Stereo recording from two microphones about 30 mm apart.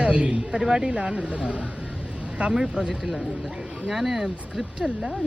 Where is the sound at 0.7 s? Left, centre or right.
Right.